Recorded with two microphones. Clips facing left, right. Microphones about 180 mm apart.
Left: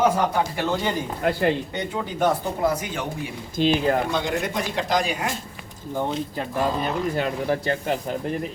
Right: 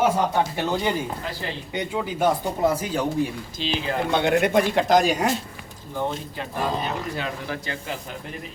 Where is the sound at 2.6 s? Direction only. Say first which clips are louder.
Right 2 dB; 30° right (ahead or behind).